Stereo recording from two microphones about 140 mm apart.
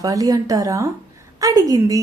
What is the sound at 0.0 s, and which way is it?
A woman's voice, 25° right (ahead or behind).